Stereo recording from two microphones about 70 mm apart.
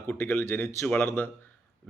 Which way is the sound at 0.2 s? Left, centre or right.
Left.